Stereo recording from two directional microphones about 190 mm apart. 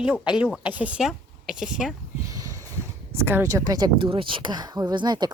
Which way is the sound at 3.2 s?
15° right (ahead or behind).